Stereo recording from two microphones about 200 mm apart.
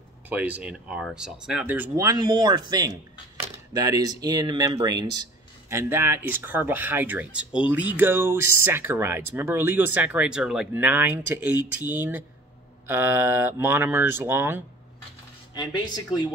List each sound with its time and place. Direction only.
0.3 s speech: 5° right (ahead or behind)
15.5 s speech: 20° left (ahead or behind)